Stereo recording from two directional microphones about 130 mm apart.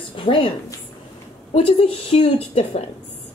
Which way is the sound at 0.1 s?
40° left (ahead or behind).